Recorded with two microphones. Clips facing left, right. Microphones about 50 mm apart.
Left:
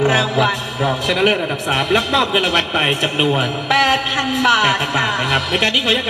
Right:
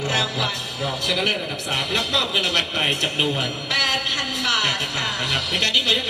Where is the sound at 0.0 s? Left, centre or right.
Left.